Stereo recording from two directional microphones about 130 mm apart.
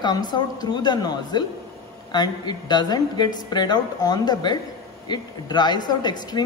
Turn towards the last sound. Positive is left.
turn(degrees=30)  # may be behind; listen again after turning